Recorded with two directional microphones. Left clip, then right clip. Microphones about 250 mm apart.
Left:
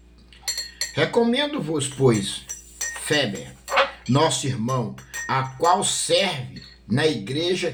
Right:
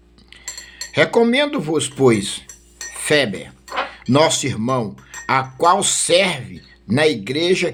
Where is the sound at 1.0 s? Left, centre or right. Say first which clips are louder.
Right 6 dB; right.